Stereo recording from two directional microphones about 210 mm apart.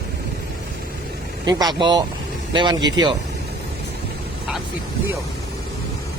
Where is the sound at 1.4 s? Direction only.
20° right (ahead or behind).